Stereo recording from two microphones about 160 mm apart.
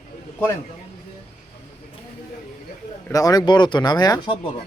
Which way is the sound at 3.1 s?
20° left (ahead or behind).